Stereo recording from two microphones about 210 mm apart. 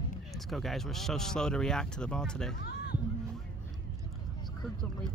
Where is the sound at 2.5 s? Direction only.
45° left (ahead or behind).